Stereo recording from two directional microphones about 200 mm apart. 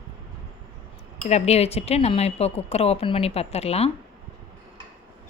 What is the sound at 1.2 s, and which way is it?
Speech, 35° left (ahead or behind).